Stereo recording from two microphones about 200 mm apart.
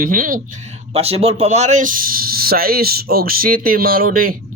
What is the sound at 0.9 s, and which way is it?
Speech, 30° right (ahead or behind).